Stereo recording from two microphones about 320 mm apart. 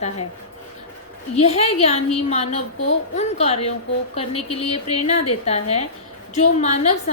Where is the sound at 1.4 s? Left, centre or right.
Centre.